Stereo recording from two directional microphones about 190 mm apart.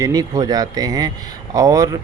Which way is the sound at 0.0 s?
20° right (ahead or behind).